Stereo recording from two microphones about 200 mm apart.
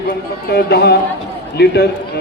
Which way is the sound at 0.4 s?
55° left (ahead or behind).